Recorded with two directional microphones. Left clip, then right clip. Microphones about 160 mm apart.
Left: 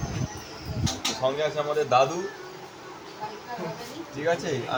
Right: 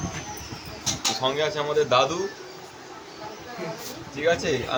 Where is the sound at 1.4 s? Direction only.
60° right (ahead or behind).